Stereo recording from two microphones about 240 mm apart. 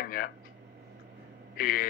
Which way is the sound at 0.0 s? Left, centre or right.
Left.